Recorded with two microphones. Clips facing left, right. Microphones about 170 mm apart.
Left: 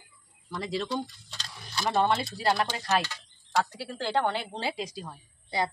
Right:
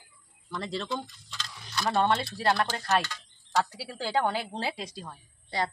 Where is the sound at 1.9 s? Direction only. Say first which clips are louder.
Even; centre (ahead or behind).